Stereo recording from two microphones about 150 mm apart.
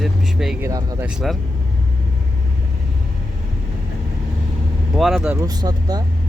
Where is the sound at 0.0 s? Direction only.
Centre (ahead or behind).